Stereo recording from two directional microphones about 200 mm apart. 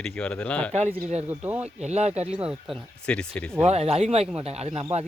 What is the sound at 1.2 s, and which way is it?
Speech, 10° right (ahead or behind).